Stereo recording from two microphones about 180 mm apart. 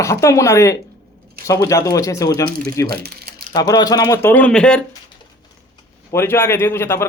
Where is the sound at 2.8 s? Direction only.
60° right (ahead or behind).